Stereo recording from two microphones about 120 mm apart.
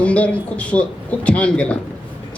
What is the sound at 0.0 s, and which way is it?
A man's voice, 10° left (ahead or behind).